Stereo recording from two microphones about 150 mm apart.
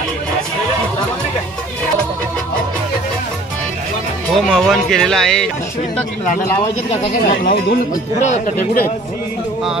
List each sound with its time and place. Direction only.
4.4 s speech: centre (ahead or behind)
6.4 s speech: 15° left (ahead or behind)
6.9 s speech: 50° left (ahead or behind)